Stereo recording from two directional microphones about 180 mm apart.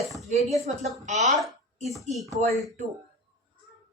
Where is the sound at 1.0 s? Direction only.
40° right (ahead or behind).